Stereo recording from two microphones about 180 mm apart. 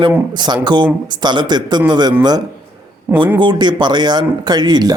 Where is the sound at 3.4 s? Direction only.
25° right (ahead or behind).